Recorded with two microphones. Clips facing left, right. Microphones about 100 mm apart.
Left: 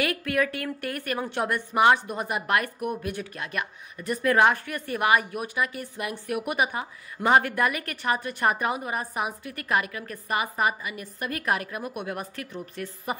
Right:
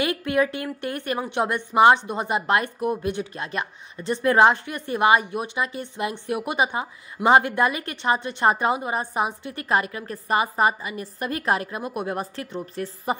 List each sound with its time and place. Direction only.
0.0 s a woman's voice: 20° right (ahead or behind)